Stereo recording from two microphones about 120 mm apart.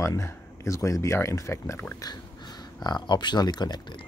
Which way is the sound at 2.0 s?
35° left (ahead or behind).